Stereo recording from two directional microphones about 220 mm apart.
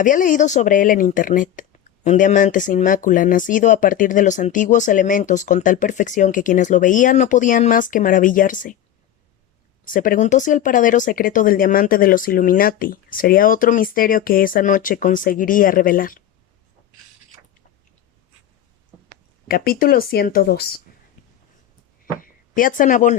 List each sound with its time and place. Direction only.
0.0 s speech: 35° left (ahead or behind)
9.8 s speech: 40° left (ahead or behind)
19.5 s speech: 40° left (ahead or behind)
22.2 s speech: 40° left (ahead or behind)